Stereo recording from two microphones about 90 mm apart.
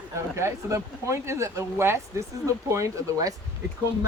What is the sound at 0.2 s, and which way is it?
Speech, 30° right (ahead or behind).